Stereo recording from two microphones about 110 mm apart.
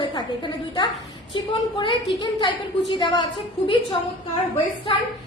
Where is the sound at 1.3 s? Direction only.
50° left (ahead or behind).